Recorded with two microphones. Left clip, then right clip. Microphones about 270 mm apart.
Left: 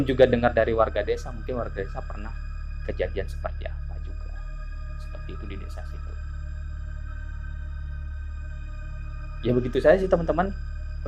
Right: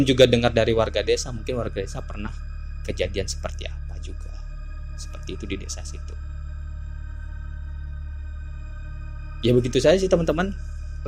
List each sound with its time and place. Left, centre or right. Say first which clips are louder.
0.0 s speech: right 2 dB; right
9.4 s speech: right 3 dB; right